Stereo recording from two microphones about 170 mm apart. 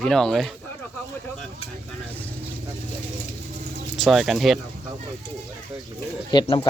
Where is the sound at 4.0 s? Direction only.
Centre (ahead or behind).